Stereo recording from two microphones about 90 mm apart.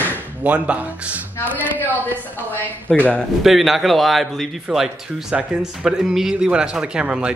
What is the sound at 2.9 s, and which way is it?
A man's voice, 10° left (ahead or behind).